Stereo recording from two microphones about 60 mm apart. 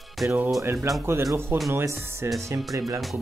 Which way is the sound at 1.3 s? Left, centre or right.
Right.